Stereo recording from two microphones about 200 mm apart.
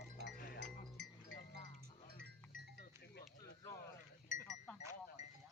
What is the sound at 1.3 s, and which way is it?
Music, 35° left (ahead or behind).